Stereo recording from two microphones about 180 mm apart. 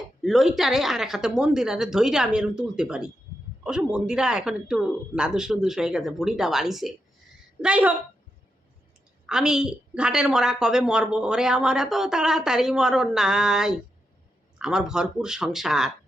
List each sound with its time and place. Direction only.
0.2 s a woman's voice: centre (ahead or behind)
9.2 s a woman's voice: 5° right (ahead or behind)